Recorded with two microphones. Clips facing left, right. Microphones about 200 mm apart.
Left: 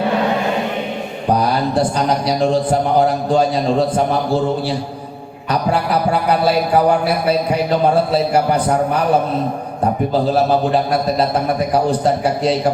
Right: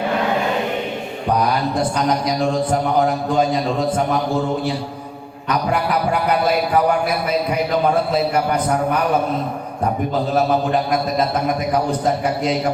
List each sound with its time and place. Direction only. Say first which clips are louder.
2.2 s speech: left 3 dB; 30° left (ahead or behind)
5.5 s speech: left 2 dB; 30° left (ahead or behind)
8.1 s speech: left 3 dB; 30° left (ahead or behind)
11.7 s speech: left 4 dB; 30° left (ahead or behind)